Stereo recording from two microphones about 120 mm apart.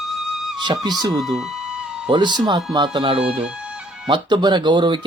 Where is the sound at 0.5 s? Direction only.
35° right (ahead or behind).